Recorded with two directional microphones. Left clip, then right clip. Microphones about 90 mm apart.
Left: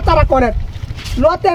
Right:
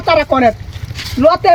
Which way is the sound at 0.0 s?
55° left (ahead or behind).